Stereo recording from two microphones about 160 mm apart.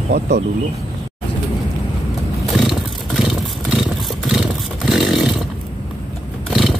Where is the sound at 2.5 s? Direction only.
Centre (ahead or behind).